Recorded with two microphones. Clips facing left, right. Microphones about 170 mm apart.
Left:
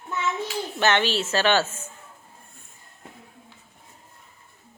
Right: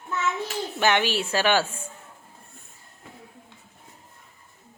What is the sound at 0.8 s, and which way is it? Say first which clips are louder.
A woman's voice: even; 10° right (ahead or behind).